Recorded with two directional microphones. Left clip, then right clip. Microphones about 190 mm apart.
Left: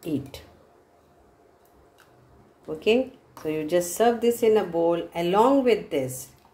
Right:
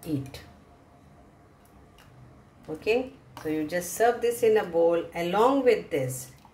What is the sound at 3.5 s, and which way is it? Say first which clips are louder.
Speech: left 5 dB; 40° left (ahead or behind).